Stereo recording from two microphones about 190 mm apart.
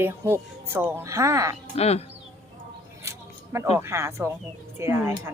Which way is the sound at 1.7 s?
35° left (ahead or behind).